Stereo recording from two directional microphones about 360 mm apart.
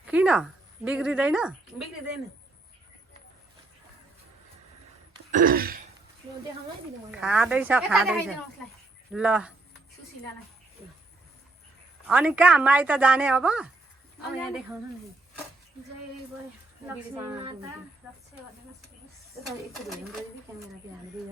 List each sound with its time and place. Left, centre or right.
0.0 s a sound: centre
0.9 s a woman's voice: centre
5.1 s throat clearing: right
7.1 s a woman's voice: centre
12.0 s a woman's voice: centre
18.0 s a woman's voice: centre